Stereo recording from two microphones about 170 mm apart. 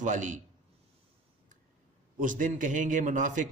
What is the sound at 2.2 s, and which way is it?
A man's voice, 50° right (ahead or behind).